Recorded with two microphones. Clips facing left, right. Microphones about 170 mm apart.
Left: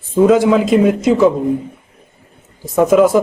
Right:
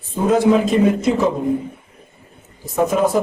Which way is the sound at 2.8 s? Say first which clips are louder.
Left 7 dB; 90° left.